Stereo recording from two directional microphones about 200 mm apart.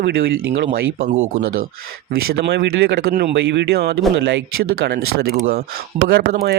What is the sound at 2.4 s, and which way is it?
Speech, 55° right (ahead or behind).